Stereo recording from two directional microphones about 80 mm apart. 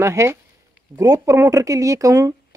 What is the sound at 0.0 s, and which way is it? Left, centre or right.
Speech, right.